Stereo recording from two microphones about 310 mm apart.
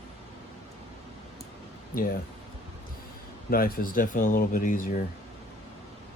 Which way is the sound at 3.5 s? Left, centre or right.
Left.